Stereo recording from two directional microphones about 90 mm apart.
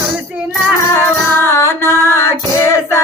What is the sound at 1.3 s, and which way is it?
Female singing, 30° left (ahead or behind).